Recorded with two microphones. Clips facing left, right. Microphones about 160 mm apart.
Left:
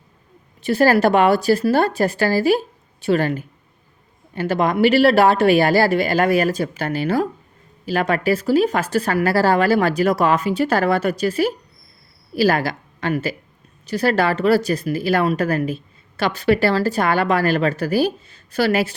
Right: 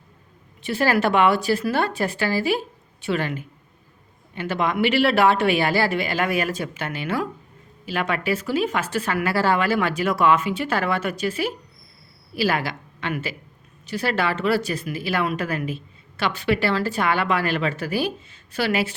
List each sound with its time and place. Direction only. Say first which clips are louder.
0.6 s a woman's voice: left 6 dB; 40° left (ahead or behind)